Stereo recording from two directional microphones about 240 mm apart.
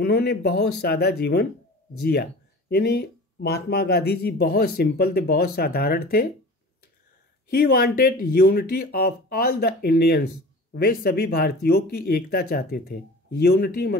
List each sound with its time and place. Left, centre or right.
0.0 s speech: left
2.7 s speech: left
7.4 s speech: left